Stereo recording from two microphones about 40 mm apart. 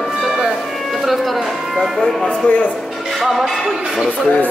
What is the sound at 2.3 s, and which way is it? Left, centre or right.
Speech, left.